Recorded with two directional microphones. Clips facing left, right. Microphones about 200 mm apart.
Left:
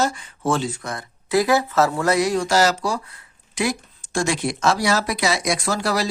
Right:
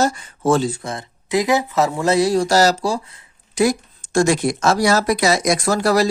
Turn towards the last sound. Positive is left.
turn(degrees=-45)  # may be behind; listen again after turning